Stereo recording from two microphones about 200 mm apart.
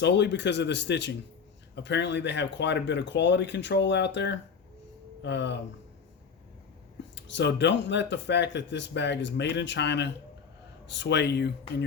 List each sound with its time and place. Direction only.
0.0 s speech: 60° left (ahead or behind)
7.2 s speech: 60° left (ahead or behind)